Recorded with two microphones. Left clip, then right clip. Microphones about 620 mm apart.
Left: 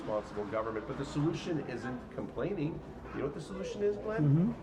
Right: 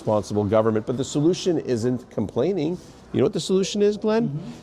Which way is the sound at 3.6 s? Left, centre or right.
Right.